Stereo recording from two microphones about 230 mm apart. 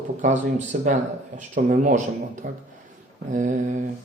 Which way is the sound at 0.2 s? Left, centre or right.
Right.